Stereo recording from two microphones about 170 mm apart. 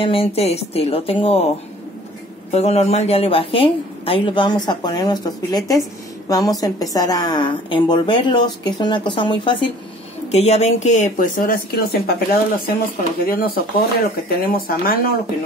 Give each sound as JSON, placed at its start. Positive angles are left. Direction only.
{"t": 0.0, "sound": "a woman's voice", "side_deg": 35}
{"t": 2.5, "sound": "a woman's voice", "side_deg": 40}
{"t": 10.3, "sound": "speech", "side_deg": 40}